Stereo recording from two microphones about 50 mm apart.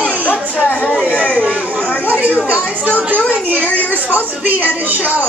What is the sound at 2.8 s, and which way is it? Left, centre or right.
Speech, right.